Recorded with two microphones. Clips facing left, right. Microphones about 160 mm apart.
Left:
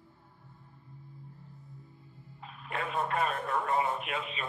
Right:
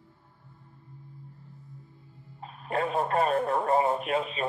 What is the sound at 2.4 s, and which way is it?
Speech, 40° right (ahead or behind).